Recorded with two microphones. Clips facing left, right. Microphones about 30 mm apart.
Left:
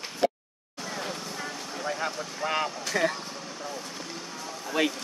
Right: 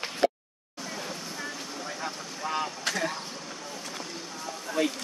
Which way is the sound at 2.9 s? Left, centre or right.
Right.